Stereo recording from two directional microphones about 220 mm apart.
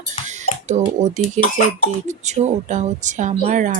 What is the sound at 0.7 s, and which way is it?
A woman's voice, 30° right (ahead or behind).